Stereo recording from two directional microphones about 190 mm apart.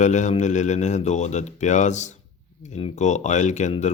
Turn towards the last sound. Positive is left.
turn(degrees=35)  # may be behind; listen again after turning